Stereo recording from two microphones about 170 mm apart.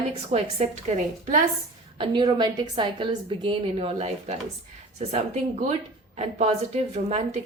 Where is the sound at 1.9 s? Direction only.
30° right (ahead or behind).